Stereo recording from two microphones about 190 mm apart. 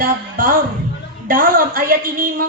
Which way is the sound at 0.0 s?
45° right (ahead or behind).